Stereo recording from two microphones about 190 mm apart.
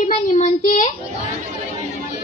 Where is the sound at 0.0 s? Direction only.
40° left (ahead or behind).